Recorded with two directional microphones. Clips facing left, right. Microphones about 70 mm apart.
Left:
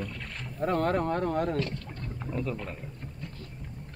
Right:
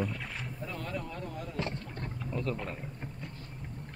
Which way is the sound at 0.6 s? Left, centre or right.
Left.